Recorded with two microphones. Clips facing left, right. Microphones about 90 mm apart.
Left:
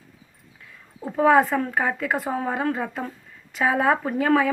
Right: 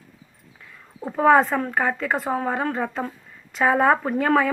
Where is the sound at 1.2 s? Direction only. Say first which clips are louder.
Right 1 dB; 5° left (ahead or behind).